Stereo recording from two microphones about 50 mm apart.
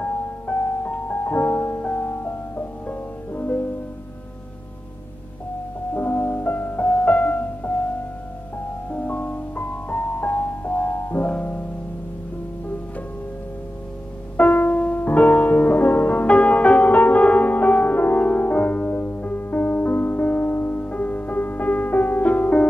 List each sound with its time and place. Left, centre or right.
0.0 s music: left
1.8 s music: left
2.0 s music: left
5.9 s music: left
8.9 s music: left
14.3 s music: left
20.7 s music: left